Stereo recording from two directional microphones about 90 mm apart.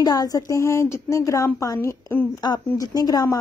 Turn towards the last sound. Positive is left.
turn(degrees=45)  # may be behind; listen again after turning